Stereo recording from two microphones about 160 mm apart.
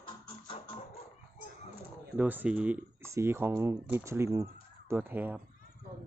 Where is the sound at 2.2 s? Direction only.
10° right (ahead or behind).